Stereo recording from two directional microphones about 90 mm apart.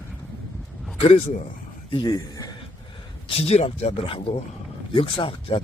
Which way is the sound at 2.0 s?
45° left (ahead or behind).